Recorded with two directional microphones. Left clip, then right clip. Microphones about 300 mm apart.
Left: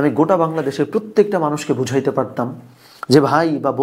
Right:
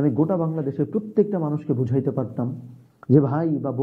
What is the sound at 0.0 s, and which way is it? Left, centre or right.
Speech, centre.